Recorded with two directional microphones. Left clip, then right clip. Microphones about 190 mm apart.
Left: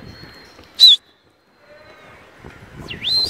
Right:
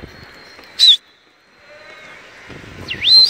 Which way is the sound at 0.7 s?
25° left (ahead or behind).